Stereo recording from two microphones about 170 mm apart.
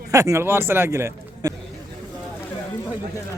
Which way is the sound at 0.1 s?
20° right (ahead or behind).